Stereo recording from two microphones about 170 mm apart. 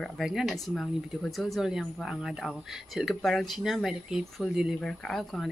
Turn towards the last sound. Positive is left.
turn(degrees=0)  # may be behind; listen again after turning